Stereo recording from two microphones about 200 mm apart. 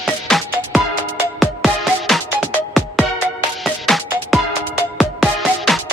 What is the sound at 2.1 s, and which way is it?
Music, centre (ahead or behind).